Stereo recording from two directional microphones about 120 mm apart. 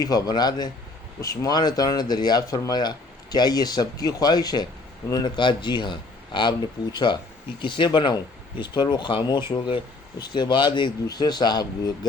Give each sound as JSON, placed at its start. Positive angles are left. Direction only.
{"t": 0.0, "sound": "speech", "side_deg": 30}